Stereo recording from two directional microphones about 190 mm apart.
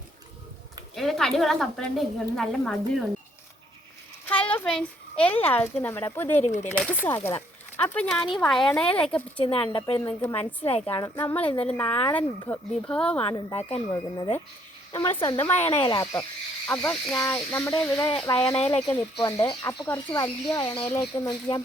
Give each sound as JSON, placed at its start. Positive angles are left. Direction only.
{"t": 0.9, "sound": "a woman's voice", "side_deg": 0}
{"t": 4.3, "sound": "a sound", "side_deg": 10}
{"t": 5.5, "sound": "speech", "side_deg": 10}
{"t": 6.4, "sound": "a woman's voice", "side_deg": 40}
{"t": 6.8, "sound": "a woman's voice", "side_deg": 10}
{"t": 9.4, "sound": "speech", "side_deg": 30}
{"t": 10.0, "sound": "speech", "side_deg": 10}
{"t": 10.3, "sound": "a woman's voice", "side_deg": 30}
{"t": 10.8, "sound": "speech", "side_deg": 15}
{"t": 13.9, "sound": "speech", "side_deg": 20}
{"t": 15.5, "sound": "speech", "side_deg": 30}
{"t": 16.6, "sound": "speech", "side_deg": 10}
{"t": 18.9, "sound": "speech", "side_deg": 15}